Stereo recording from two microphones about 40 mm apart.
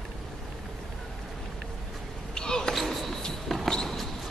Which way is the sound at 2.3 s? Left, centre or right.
Centre.